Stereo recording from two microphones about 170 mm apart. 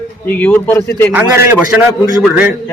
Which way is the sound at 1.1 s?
15° right (ahead or behind).